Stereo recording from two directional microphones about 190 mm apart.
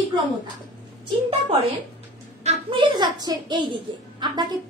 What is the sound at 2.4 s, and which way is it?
A woman's voice, 25° right (ahead or behind).